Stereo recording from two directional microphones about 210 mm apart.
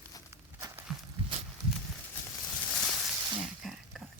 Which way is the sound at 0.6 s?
15° right (ahead or behind).